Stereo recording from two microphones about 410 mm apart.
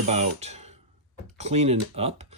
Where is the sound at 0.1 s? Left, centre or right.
Centre.